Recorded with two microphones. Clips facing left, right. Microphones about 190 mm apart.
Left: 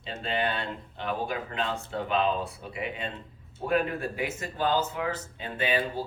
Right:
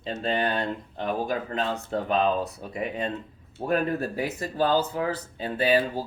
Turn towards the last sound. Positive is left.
turn(degrees=-35)  # may be behind; listen again after turning